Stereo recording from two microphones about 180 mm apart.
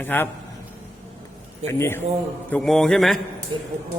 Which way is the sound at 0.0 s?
10° left (ahead or behind).